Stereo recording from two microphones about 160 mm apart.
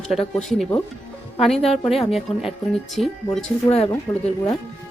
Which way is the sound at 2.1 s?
Centre (ahead or behind).